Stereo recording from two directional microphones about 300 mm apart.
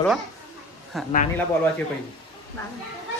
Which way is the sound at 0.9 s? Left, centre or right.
Centre.